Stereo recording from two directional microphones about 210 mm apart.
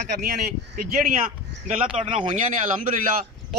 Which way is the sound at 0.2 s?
45° right (ahead or behind).